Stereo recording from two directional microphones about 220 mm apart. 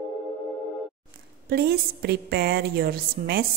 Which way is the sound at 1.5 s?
45° right (ahead or behind).